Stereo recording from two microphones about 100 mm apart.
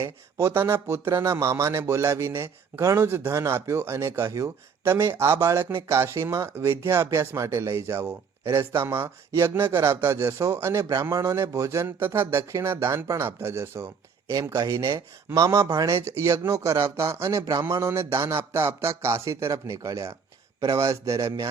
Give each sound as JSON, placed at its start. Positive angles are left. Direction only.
{"t": 0.0, "sound": "speech", "side_deg": -30}